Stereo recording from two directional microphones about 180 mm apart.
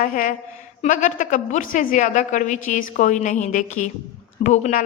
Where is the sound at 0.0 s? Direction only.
50° left (ahead or behind).